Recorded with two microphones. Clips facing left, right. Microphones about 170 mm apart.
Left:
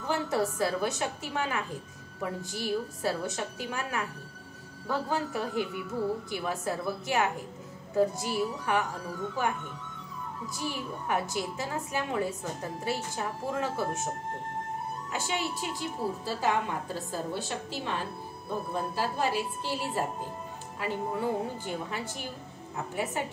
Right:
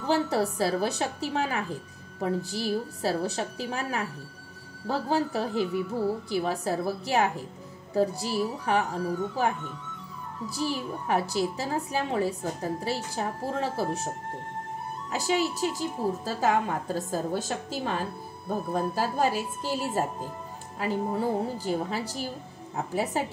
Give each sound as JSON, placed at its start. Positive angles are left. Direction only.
{"t": 0.0, "sound": "a woman's voice", "side_deg": -35}
{"t": 10.5, "sound": "a woman's voice", "side_deg": -35}
{"t": 15.0, "sound": "a woman's voice", "side_deg": -40}